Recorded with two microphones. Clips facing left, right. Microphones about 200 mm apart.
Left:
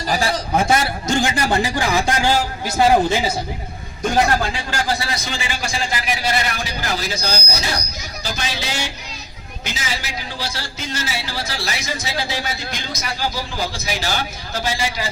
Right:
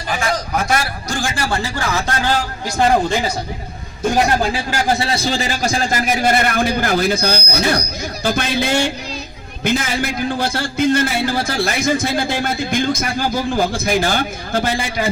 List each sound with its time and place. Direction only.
0.1 s a man's voice: 35° left (ahead or behind); by 3.3 s 5° left (ahead or behind)
4.9 s a man's voice: 30° right (ahead or behind); by 15.1 s 55° right (ahead or behind)